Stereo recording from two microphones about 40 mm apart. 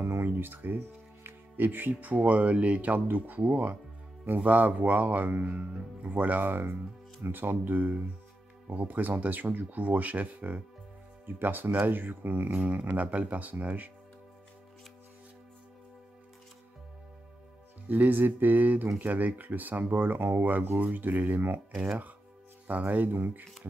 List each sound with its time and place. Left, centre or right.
0.3 s speech: right
3.1 s speech: right
6.5 s speech: right
11.2 s speech: right
12.6 s speech: right
17.8 s speech: right
22.7 s speech: right
23.1 s speech: right